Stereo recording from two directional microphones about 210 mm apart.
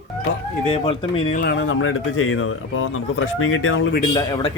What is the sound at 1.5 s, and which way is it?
Speech, 70° left (ahead or behind).